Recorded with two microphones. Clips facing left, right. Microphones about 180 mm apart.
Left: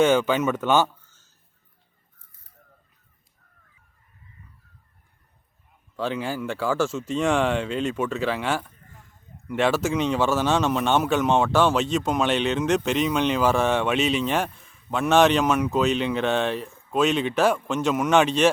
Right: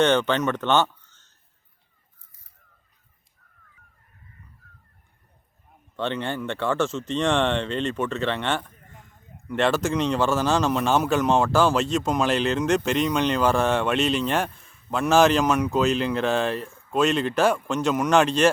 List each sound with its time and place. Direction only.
0.0 s speech: 5° left (ahead or behind)
6.0 s speech: 5° left (ahead or behind)